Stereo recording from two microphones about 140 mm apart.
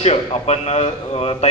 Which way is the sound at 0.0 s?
50° left (ahead or behind).